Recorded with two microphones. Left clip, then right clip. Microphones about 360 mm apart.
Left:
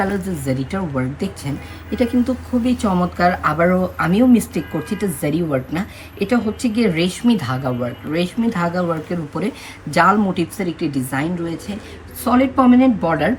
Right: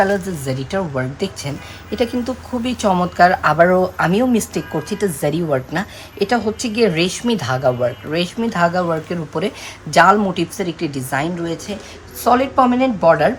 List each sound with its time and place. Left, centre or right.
0.0 s a woman's voice: right